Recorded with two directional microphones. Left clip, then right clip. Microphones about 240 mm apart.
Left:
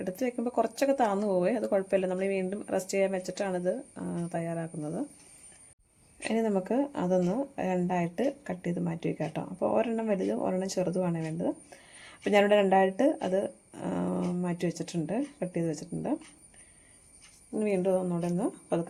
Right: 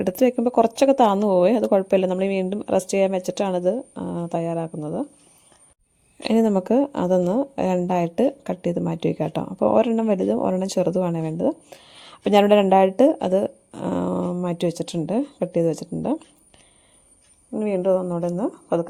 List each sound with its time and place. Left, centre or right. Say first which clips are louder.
0.0 s speech: right 12 dB; right
6.1 s speech: right 9 dB; right
17.6 s a woman's voice: right 7 dB; right